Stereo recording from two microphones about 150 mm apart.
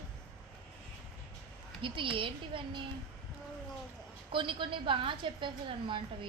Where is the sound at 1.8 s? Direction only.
35° right (ahead or behind).